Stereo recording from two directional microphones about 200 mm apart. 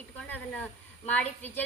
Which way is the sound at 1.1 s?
10° left (ahead or behind).